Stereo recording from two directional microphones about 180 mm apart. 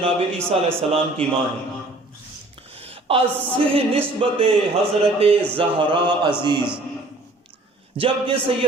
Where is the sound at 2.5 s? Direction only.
30° right (ahead or behind).